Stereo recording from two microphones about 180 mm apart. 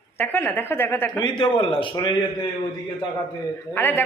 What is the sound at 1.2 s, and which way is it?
Speech, 25° left (ahead or behind).